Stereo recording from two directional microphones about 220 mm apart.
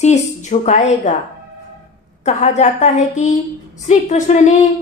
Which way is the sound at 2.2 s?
30° left (ahead or behind).